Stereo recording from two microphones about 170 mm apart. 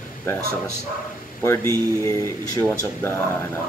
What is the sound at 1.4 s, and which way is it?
Speech, 15° left (ahead or behind).